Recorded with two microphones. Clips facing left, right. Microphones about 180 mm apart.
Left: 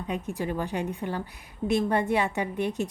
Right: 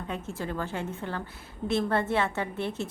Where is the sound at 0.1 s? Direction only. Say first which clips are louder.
Left 4 dB; 15° left (ahead or behind).